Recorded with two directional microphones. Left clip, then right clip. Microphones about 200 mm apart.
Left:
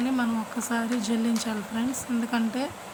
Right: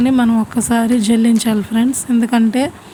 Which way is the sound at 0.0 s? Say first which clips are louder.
Right 13 dB; 40° right (ahead or behind).